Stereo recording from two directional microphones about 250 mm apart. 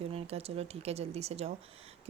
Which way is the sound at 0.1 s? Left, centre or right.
Right.